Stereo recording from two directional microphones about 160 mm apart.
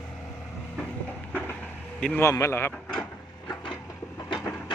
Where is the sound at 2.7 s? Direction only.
5° left (ahead or behind).